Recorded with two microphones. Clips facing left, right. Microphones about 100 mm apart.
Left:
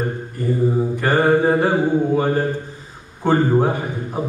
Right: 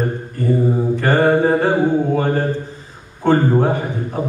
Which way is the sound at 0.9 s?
15° left (ahead or behind).